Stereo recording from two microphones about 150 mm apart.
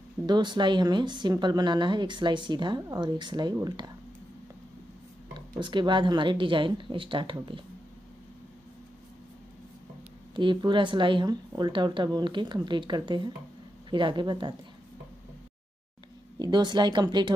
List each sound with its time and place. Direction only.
0.3 s speech: 30° right (ahead or behind)
5.3 s speech: 30° right (ahead or behind)
10.3 s speech: 30° right (ahead or behind)
16.3 s speech: 30° right (ahead or behind)